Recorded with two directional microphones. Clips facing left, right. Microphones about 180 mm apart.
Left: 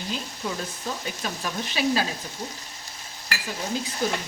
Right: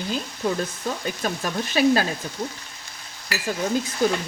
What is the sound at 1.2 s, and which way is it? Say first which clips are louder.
Speech: right 5 dB; 50° right (ahead or behind).